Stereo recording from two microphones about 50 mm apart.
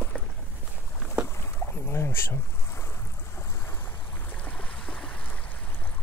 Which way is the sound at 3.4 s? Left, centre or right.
Left.